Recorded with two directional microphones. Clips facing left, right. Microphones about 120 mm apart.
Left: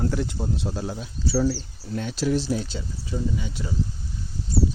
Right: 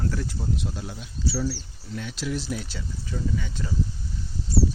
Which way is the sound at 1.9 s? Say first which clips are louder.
Left 6 dB; 35° left (ahead or behind).